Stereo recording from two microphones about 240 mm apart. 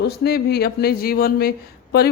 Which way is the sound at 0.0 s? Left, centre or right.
Left.